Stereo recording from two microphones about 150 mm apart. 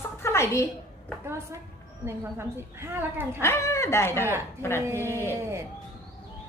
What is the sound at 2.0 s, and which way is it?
A woman's voice, 15° right (ahead or behind).